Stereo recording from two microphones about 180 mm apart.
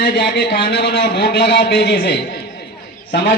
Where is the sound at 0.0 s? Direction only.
60° left (ahead or behind).